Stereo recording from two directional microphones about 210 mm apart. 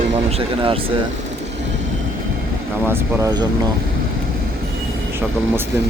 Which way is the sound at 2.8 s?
15° right (ahead or behind).